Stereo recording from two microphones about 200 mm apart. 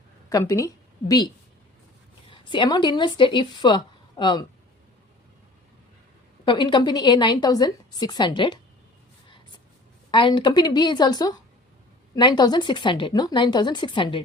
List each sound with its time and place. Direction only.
0.3 s a woman's voice: 15° left (ahead or behind)
2.3 s a woman's voice: 25° left (ahead or behind)
6.4 s a woman's voice: 25° left (ahead or behind)
10.1 s a woman's voice: 25° left (ahead or behind)